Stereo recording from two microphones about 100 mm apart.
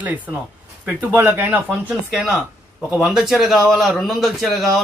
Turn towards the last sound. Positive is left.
turn(degrees=0)  # may be behind; listen again after turning